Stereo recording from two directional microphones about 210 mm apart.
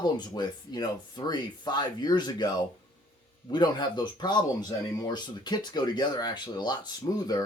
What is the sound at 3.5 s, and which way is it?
Speech, 20° left (ahead or behind).